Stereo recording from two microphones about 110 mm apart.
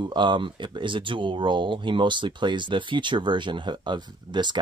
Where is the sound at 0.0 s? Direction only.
45° right (ahead or behind).